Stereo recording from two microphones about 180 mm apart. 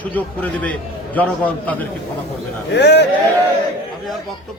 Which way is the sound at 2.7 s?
70° left (ahead or behind).